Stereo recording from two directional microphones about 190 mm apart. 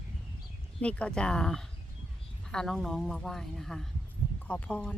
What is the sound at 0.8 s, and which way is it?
Speech, 5° left (ahead or behind).